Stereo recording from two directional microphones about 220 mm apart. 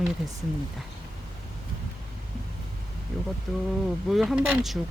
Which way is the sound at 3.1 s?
5° left (ahead or behind).